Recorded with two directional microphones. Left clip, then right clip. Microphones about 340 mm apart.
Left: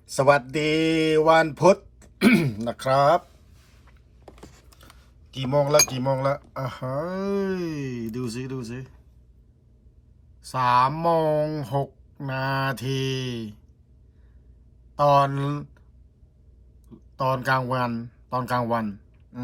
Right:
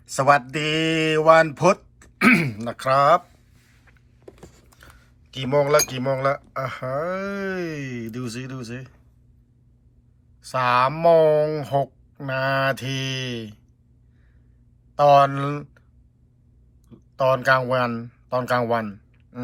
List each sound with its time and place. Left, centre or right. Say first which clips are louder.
0.0 s mantra: right 1 dB; centre
0.4 s speech: even; centre
3.9 s vehicle: right 3 dB; centre
5.3 s speech: right 2 dB; centre
10.5 s speech: right 1 dB; centre
15.2 s speech: right 4 dB; centre
16.9 s speech: right 5 dB; centre